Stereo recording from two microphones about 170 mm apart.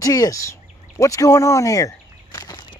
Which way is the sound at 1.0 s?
20° left (ahead or behind).